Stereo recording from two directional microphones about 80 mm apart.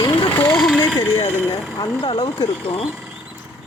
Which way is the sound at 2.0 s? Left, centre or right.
Left.